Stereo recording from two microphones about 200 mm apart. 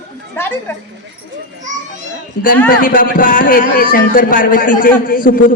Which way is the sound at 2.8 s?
45° left (ahead or behind).